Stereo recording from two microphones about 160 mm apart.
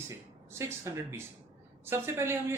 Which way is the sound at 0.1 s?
15° right (ahead or behind).